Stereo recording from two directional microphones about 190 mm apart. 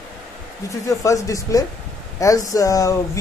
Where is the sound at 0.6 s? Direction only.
15° left (ahead or behind).